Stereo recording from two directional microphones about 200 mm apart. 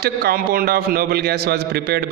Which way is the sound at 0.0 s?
50° right (ahead or behind).